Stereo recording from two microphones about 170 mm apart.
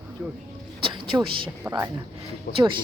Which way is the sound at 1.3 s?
30° right (ahead or behind).